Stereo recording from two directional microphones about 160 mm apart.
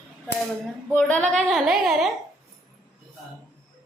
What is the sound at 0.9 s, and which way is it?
A woman's voice, 10° left (ahead or behind).